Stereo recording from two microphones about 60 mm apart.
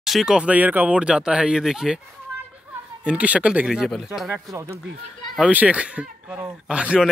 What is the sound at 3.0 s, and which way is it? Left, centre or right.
Speech, right.